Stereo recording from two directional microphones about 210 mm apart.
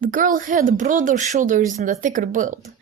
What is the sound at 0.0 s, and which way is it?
A woman's voice, 40° right (ahead or behind).